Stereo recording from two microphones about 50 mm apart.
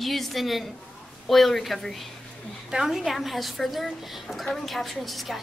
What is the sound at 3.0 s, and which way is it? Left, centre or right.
A woman's voice, centre.